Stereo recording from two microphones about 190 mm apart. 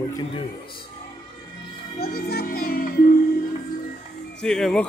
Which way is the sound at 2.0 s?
55° left (ahead or behind).